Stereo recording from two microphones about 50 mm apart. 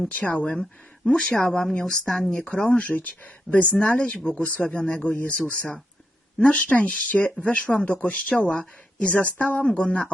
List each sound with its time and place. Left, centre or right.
0.1 s speech: left
0.4 s speech: centre
2.3 s speech: left